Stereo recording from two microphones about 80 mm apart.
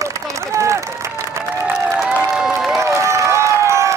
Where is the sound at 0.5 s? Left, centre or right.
Right.